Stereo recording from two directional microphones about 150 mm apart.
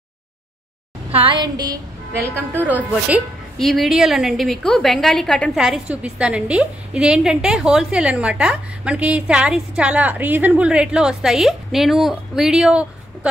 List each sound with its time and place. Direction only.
1.1 s a woman's voice: 35° right (ahead or behind)
2.2 s a woman's voice: 15° right (ahead or behind)
3.5 s a woman's voice: centre (ahead or behind)